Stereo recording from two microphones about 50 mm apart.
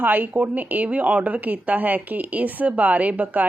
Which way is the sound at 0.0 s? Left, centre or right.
Right.